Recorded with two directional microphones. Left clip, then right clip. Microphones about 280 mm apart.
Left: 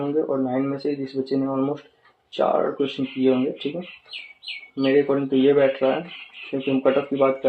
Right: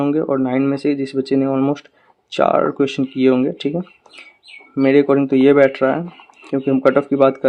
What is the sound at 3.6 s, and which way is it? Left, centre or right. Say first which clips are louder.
Speech: right 7 dB; right.